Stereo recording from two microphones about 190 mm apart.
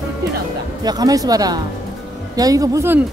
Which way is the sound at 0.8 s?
20° right (ahead or behind).